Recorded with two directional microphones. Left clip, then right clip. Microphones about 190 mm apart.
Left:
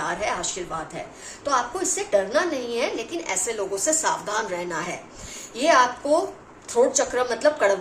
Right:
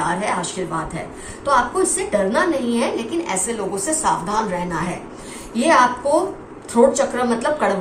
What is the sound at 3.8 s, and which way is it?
Speech, 55° left (ahead or behind).